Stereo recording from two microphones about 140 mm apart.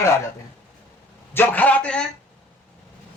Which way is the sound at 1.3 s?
15° left (ahead or behind).